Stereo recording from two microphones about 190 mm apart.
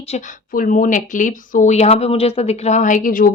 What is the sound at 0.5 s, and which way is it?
A woman's voice, 45° left (ahead or behind).